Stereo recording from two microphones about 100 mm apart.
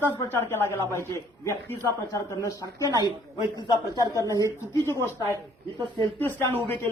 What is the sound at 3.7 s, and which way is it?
Speech, 35° left (ahead or behind).